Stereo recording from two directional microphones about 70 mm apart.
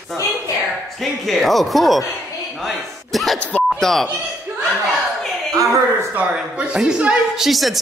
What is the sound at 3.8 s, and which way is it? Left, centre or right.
Speech, centre.